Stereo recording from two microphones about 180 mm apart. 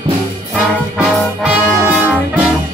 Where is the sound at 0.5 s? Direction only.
5° right (ahead or behind).